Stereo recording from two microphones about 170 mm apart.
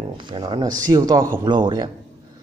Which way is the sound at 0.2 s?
25° right (ahead or behind).